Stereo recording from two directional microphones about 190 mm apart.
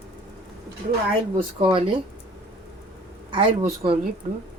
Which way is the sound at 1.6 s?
25° right (ahead or behind).